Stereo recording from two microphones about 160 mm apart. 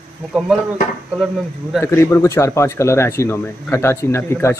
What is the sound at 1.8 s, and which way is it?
Speech, 15° left (ahead or behind).